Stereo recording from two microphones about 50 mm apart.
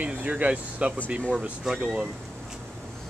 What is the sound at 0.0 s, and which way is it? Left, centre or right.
Speech, right.